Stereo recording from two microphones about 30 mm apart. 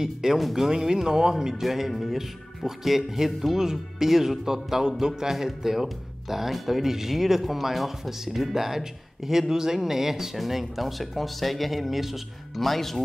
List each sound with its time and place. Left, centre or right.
0.0 s speech: centre
0.4 s speech: centre
0.7 s speech: right
10.4 s speech: centre
12.5 s speech: centre